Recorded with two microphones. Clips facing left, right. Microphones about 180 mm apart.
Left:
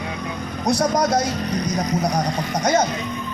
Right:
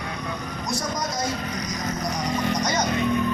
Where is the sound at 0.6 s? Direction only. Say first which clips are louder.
Left 11 dB; 65° left (ahead or behind).